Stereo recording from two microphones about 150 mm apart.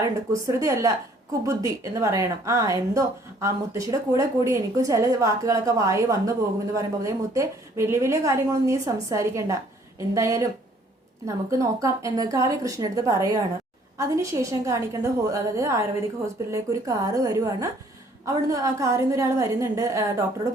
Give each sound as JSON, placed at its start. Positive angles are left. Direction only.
{"t": 0.0, "sound": "a woman's voice", "side_deg": -20}